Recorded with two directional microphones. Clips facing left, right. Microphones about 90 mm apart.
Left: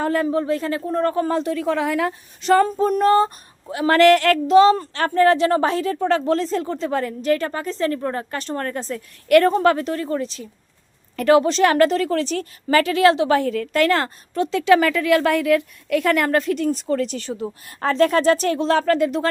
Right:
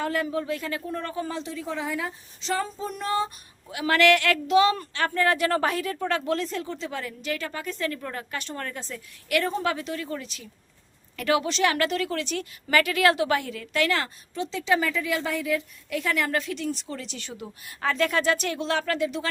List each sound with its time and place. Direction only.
0.0 s speech: 35° left (ahead or behind)
1.5 s speech: 70° left (ahead or behind); by 19.3 s 45° left (ahead or behind)